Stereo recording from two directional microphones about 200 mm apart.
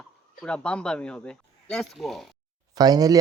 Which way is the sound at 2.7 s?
20° right (ahead or behind).